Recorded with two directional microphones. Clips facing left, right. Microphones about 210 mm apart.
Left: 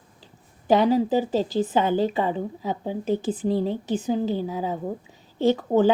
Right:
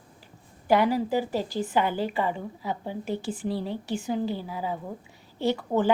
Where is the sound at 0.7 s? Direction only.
20° left (ahead or behind).